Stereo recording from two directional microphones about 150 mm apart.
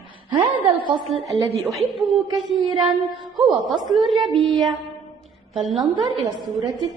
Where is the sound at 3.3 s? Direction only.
Centre (ahead or behind).